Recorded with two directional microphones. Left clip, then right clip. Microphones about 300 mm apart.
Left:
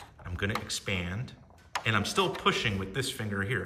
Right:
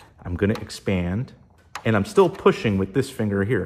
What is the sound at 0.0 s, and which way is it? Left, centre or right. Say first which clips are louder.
Speech: right 10 dB; centre.